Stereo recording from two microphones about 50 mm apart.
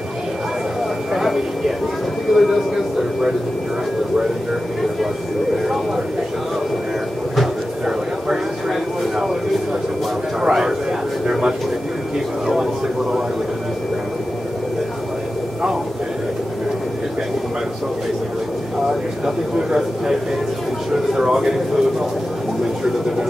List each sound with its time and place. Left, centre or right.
1.1 s a sound: centre
2.3 s speech: centre
7.8 s vehicle: centre
10.4 s speech: centre
18.9 s speech: centre